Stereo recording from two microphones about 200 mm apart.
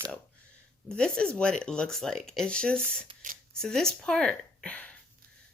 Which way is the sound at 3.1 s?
40° right (ahead or behind).